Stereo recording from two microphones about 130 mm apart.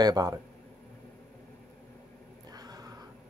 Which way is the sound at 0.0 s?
30° right (ahead or behind).